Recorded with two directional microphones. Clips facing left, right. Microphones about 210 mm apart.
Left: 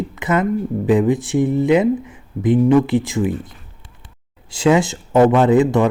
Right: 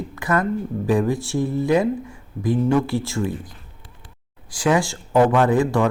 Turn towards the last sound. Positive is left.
turn(degrees=20)  # may be behind; listen again after turning